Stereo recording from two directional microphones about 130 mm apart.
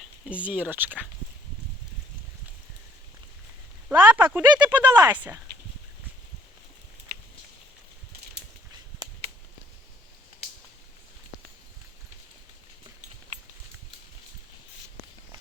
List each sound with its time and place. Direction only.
0.0 s speech: 10° right (ahead or behind)
3.8 s speech: 10° right (ahead or behind)
4.9 s speech: 30° right (ahead or behind)
5.1 s speech: 15° right (ahead or behind)
9.0 s a sound: 30° right (ahead or behind)